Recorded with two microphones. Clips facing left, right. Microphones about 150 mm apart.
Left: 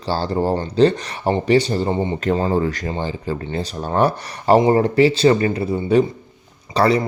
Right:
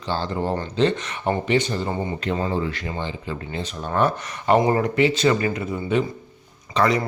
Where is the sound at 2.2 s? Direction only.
40° left (ahead or behind).